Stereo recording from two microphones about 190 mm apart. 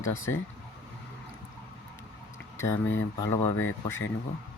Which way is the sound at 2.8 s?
90° left.